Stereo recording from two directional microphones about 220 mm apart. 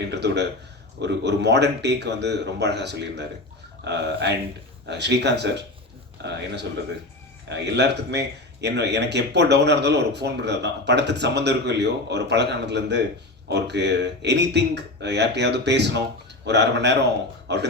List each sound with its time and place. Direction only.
0.1 s speech: 50° right (ahead or behind)